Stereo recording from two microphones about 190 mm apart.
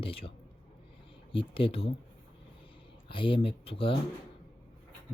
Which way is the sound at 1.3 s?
30° left (ahead or behind).